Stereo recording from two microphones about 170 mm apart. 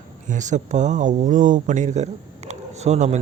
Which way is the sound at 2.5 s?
40° right (ahead or behind).